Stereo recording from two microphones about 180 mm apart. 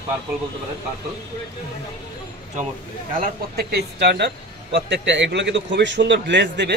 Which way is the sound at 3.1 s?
55° right (ahead or behind).